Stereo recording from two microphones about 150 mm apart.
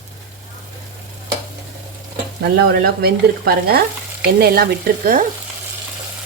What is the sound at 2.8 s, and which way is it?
Speech, 90° right.